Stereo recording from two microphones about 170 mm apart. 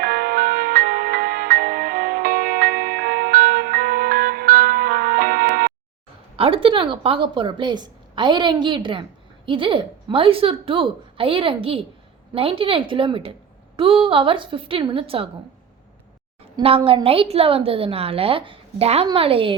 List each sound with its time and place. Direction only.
0.0 s music: 60° right (ahead or behind)
6.3 s a woman's voice: 35° right (ahead or behind)
16.6 s a woman's voice: 30° right (ahead or behind)